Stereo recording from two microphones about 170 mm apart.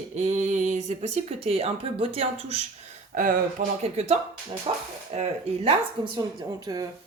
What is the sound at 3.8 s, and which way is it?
Speech, 40° right (ahead or behind).